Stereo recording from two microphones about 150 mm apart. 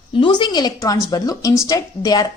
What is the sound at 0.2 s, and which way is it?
A woman's voice, 30° left (ahead or behind).